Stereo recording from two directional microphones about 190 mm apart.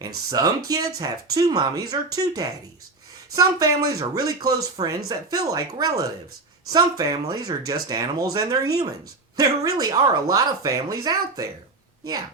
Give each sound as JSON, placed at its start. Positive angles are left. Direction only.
{"t": 0.3, "sound": "speech", "side_deg": -20}